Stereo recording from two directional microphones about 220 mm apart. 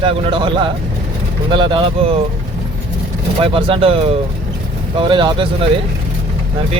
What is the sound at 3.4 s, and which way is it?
Speech, 25° right (ahead or behind).